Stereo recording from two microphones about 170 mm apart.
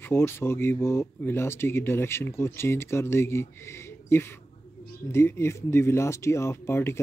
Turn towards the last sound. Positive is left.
turn(degrees=15)  # may be behind; listen again after turning